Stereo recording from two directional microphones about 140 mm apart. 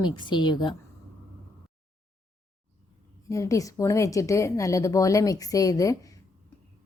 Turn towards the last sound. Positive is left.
turn(degrees=25)  # may be behind; listen again after turning